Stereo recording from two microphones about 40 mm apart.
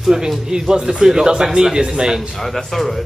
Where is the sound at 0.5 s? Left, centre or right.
Centre.